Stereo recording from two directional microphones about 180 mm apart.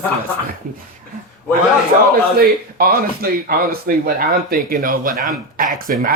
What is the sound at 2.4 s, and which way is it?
Speech, 55° right (ahead or behind).